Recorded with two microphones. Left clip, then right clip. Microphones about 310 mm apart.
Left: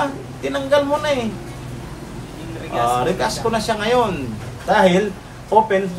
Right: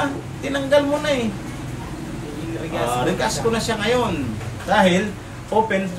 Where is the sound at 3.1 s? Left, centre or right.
Centre.